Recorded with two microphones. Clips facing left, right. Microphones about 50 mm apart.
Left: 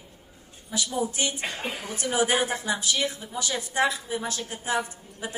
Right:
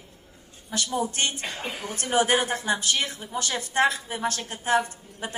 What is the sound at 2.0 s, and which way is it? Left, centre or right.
A woman's voice, right.